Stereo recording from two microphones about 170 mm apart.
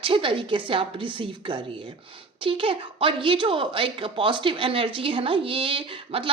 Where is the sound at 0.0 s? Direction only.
30° right (ahead or behind).